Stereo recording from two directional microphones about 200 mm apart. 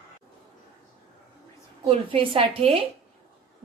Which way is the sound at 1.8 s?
30° right (ahead or behind).